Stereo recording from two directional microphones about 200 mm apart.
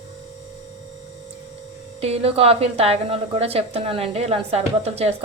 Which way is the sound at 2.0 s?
30° right (ahead or behind).